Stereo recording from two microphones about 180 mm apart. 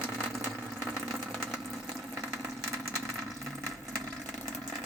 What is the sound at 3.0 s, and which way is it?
Water, centre (ahead or behind).